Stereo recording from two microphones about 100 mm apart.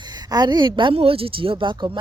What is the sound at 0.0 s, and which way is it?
Speech, 45° right (ahead or behind).